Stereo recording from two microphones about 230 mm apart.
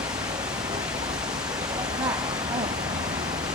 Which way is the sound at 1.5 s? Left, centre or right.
Centre.